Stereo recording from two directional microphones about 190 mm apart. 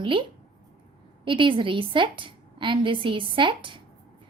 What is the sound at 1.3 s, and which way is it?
A woman's voice, 25° right (ahead or behind).